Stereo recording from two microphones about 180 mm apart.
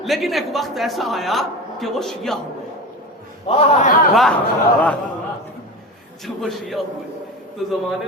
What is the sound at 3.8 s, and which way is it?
Speech, 45° left (ahead or behind).